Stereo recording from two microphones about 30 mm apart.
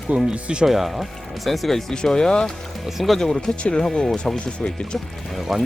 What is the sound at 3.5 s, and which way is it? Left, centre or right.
Speech, centre.